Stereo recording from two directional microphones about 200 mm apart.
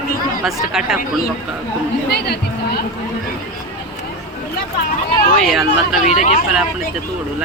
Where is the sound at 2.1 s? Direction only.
55° left (ahead or behind).